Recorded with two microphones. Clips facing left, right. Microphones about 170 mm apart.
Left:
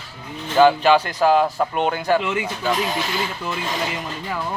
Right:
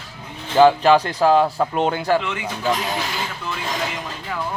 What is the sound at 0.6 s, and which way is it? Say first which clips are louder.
Speech: right 1 dB; 35° right (ahead or behind).